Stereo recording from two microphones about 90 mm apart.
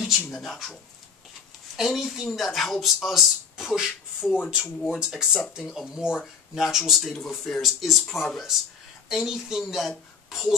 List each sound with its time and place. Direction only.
0.3 s speech: centre (ahead or behind)
1.8 s speech: centre (ahead or behind)